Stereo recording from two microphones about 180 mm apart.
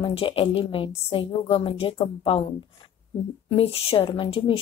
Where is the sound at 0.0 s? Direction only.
30° left (ahead or behind).